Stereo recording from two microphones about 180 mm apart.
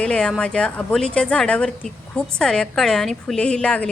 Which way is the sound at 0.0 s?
5° left (ahead or behind).